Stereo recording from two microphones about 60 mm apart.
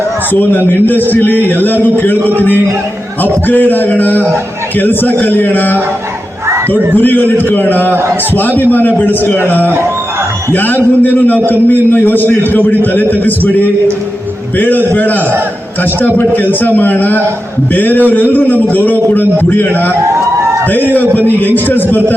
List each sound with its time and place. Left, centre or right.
0.3 s a man's voice: left
6.9 s a man's voice: left